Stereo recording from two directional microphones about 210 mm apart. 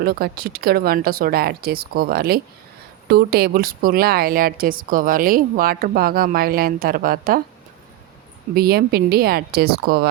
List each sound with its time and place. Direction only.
0.0 s speech: 45° right (ahead or behind)
8.5 s speech: 50° right (ahead or behind)